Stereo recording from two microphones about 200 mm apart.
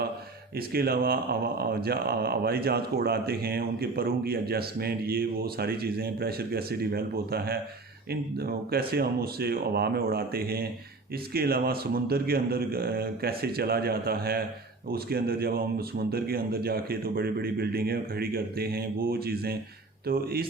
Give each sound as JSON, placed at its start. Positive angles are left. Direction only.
{"t": 0.7, "sound": "speech", "side_deg": -50}